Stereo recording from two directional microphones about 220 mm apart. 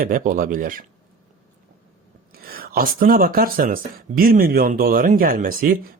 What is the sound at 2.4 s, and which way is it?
Speech, 40° right (ahead or behind).